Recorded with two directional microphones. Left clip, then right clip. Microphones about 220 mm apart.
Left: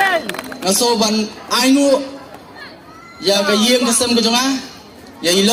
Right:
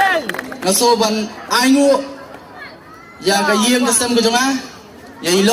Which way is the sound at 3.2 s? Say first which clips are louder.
Even; 25° right (ahead or behind).